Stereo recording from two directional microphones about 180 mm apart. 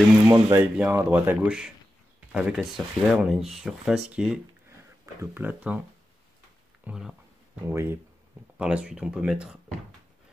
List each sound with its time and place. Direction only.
0.3 s speech: 15° right (ahead or behind)
6.8 s speech: 5° right (ahead or behind)